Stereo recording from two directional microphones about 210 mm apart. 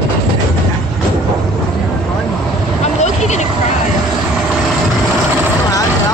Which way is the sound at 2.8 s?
35° left (ahead or behind).